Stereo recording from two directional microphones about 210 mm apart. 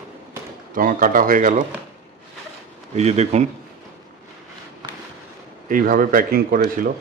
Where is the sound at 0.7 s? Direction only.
40° right (ahead or behind).